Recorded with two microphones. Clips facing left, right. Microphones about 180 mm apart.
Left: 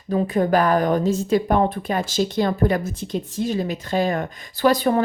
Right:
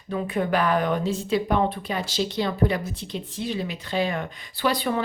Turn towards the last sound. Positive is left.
turn(degrees=45)  # may be behind; listen again after turning